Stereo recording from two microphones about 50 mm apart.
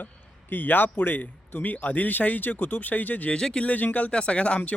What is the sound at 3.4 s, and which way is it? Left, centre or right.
Speech, centre.